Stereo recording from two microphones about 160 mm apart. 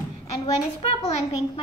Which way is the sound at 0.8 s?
40° left (ahead or behind).